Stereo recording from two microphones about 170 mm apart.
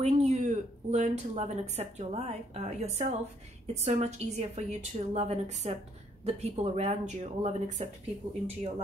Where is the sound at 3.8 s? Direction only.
40° right (ahead or behind).